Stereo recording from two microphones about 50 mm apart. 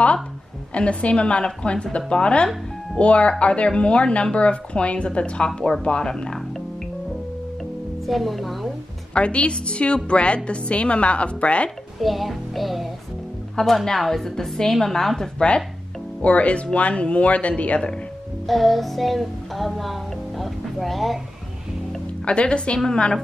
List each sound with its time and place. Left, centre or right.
0.7 s a woman's voice: left
8.1 s music: centre
9.1 s a woman's voice: left
12.0 s music: centre
13.6 s a woman's voice: centre
16.2 s a woman's voice: left
18.5 s music: centre
22.2 s a woman's voice: left